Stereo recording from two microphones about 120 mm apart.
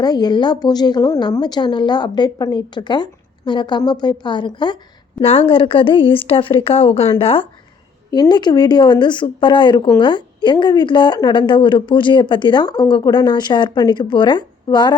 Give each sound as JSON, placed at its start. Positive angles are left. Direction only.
{"t": 0.0, "sound": "a woman's voice", "side_deg": 35}
{"t": 5.2, "sound": "a woman's voice", "side_deg": 50}
{"t": 8.1, "sound": "a woman's voice", "side_deg": 35}